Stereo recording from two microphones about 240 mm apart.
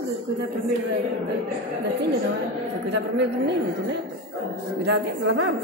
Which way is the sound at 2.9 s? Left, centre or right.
Right.